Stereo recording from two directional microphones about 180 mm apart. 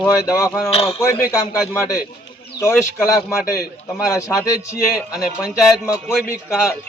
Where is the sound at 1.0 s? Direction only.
15° left (ahead or behind).